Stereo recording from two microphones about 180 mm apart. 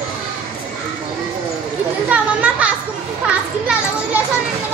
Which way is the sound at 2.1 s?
5° right (ahead or behind).